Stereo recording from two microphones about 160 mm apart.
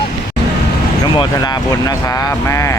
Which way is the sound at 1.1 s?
25° left (ahead or behind).